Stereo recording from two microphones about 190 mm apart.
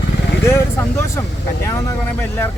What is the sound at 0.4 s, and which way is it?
Speech, 15° left (ahead or behind).